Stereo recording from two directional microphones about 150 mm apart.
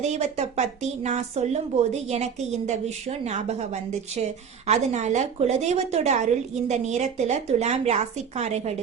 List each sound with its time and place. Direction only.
0.0 s speech: 50° right (ahead or behind)